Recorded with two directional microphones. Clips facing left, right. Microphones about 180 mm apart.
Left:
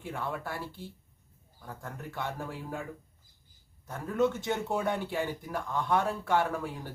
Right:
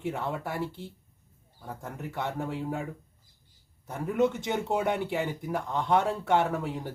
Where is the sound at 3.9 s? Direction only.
20° right (ahead or behind).